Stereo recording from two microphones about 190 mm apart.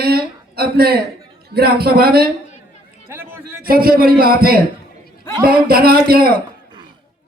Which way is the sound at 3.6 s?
50° right (ahead or behind).